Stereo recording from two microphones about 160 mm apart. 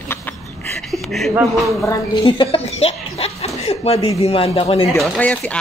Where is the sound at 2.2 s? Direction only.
35° left (ahead or behind).